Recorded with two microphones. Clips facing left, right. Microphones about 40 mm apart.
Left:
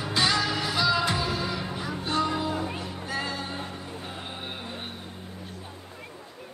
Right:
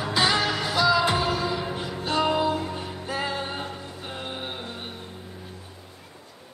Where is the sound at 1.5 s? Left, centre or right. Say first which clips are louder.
Right 4 dB; centre.